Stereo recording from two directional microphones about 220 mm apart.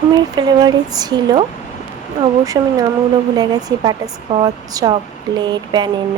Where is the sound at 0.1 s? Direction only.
20° right (ahead or behind).